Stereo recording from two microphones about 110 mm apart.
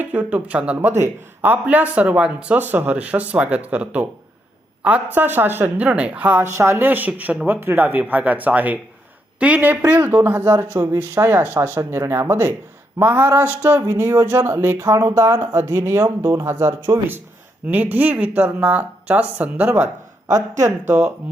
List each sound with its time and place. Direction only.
0.0 s a woman's voice: 15° right (ahead or behind)
6.4 s speech: 25° right (ahead or behind)
17.7 s speech: 15° right (ahead or behind)